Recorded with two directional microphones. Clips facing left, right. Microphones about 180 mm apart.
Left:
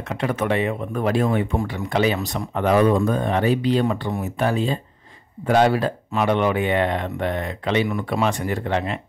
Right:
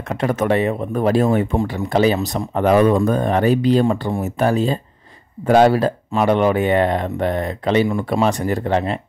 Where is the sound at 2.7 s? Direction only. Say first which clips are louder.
Right 3 dB; 55° right (ahead or behind).